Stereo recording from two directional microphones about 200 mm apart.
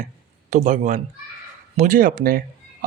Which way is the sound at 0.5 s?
40° right (ahead or behind).